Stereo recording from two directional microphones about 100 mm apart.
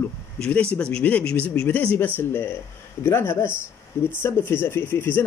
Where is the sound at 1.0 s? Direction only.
15° left (ahead or behind).